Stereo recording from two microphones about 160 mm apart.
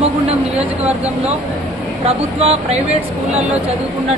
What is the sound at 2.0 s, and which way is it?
Speech, 40° right (ahead or behind).